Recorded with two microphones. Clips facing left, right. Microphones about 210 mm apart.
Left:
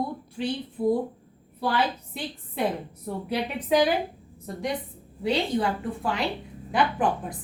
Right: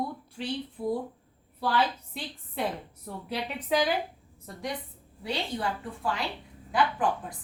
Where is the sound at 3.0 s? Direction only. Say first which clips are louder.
Left 6 dB; 15° left (ahead or behind).